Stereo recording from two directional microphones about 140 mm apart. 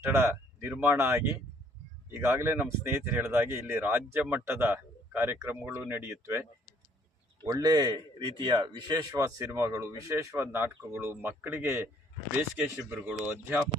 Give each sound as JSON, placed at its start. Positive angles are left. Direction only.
{"t": 0.0, "sound": "speech", "side_deg": -20}
{"t": 7.4, "sound": "speech", "side_deg": -25}